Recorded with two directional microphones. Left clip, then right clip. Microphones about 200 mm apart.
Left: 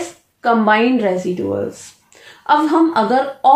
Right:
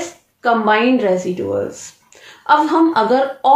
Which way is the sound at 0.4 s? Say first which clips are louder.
Even; 50° left (ahead or behind).